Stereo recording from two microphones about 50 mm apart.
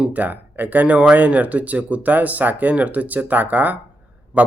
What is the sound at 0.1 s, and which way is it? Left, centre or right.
Speech, right.